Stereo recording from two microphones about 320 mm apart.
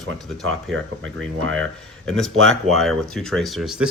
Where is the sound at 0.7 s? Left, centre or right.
Right.